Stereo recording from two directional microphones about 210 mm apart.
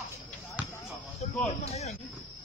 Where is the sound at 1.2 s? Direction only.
30° left (ahead or behind).